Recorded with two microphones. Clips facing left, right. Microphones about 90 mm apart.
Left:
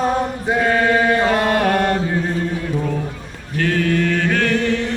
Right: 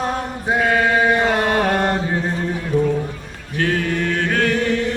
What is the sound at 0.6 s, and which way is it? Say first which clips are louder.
Chant: even; 5° right (ahead or behind).